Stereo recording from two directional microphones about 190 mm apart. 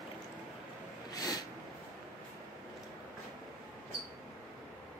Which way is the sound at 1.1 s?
20° left (ahead or behind).